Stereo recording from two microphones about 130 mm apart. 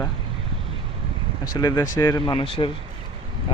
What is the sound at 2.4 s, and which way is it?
Speech, 40° left (ahead or behind).